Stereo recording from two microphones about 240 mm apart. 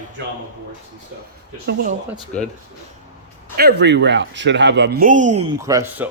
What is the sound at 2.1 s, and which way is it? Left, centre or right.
Speech, centre.